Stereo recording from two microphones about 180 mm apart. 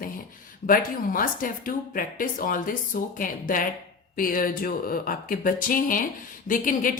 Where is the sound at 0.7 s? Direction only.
50° left (ahead or behind).